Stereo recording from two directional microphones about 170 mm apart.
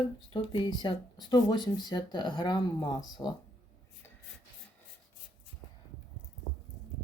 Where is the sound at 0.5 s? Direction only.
30° left (ahead or behind).